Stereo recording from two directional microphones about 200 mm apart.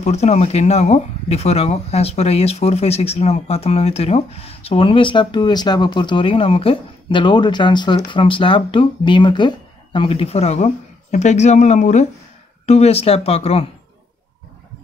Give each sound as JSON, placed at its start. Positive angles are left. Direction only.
{"t": 0.0, "sound": "speech", "side_deg": 35}